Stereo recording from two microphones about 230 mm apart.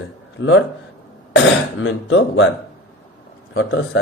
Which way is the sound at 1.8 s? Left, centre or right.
Left.